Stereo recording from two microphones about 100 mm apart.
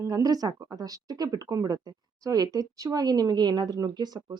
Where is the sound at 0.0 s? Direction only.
40° right (ahead or behind).